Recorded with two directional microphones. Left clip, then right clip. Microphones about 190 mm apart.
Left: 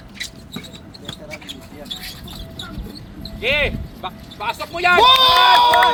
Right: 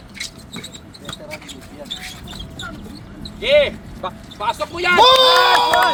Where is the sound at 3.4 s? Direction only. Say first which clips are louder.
Right 4 dB; 80° right.